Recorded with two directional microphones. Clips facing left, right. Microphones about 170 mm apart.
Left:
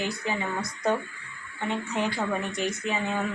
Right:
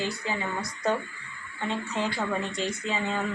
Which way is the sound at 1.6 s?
15° left (ahead or behind).